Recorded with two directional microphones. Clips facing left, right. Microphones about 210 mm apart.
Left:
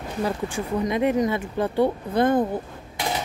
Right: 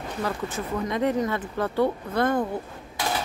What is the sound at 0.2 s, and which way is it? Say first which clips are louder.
Speech: left 4 dB; 15° left (ahead or behind).